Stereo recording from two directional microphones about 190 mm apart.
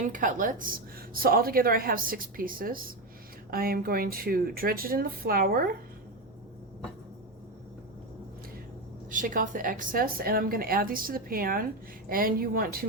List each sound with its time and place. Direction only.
0.0 s a woman's voice: 45° right (ahead or behind)
9.0 s a woman's voice: 45° right (ahead or behind)